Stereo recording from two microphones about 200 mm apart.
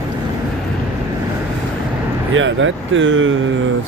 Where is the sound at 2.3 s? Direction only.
70° right (ahead or behind).